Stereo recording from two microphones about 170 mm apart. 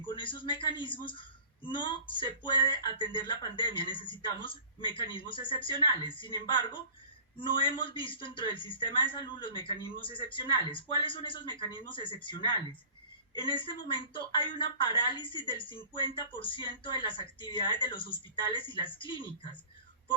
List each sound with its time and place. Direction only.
0.1 s a woman's voice: 30° left (ahead or behind)